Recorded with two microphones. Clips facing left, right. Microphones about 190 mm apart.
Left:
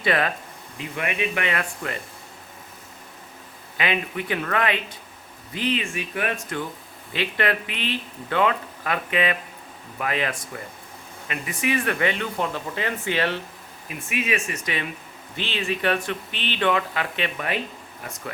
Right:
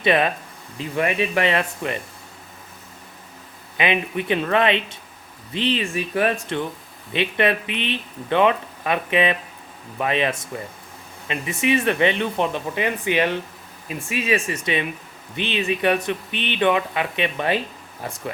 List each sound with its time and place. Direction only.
0.0 s speech: 20° right (ahead or behind)
0.8 s speech: 35° right (ahead or behind)
3.8 s speech: 20° right (ahead or behind)
13.8 s speech: 30° right (ahead or behind)